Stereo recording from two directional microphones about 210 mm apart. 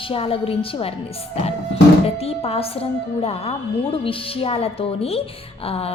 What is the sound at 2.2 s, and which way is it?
A woman's voice, 30° left (ahead or behind).